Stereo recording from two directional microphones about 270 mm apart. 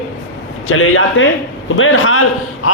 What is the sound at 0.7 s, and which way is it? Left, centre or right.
A man's voice, left.